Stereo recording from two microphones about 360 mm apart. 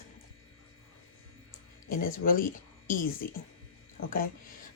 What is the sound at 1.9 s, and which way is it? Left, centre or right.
Speech, left.